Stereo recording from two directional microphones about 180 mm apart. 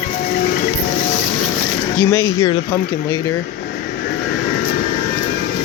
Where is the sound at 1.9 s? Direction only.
20° left (ahead or behind).